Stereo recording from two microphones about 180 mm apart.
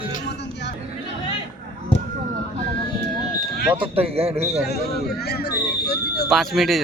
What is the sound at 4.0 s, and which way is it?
Speech, 35° right (ahead or behind).